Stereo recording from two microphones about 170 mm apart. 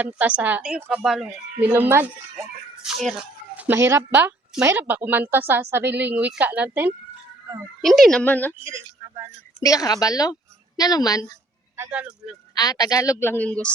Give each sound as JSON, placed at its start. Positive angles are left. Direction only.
{"t": 0.0, "sound": "speech", "side_deg": -10}
{"t": 7.8, "sound": "a woman's voice", "side_deg": 0}
{"t": 8.6, "sound": "speech", "side_deg": -15}
{"t": 9.6, "sound": "speech", "side_deg": 20}
{"t": 11.8, "sound": "speech", "side_deg": -10}
{"t": 12.5, "sound": "speech", "side_deg": 20}